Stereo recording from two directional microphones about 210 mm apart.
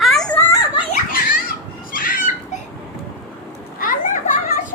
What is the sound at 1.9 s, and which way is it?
Fowl, 40° left (ahead or behind).